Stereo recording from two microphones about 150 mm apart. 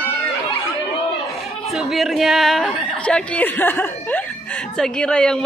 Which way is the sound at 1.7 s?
Centre (ahead or behind).